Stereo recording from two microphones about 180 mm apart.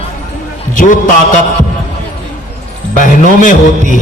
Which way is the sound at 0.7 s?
45° left (ahead or behind).